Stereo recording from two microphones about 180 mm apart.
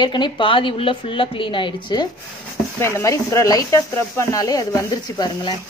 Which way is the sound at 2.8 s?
15° left (ahead or behind).